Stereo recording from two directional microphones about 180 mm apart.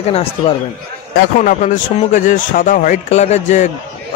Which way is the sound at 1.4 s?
45° left (ahead or behind).